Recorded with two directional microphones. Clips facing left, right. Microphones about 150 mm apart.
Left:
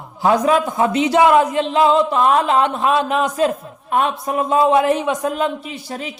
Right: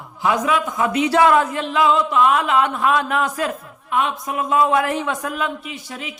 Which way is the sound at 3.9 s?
40° left (ahead or behind).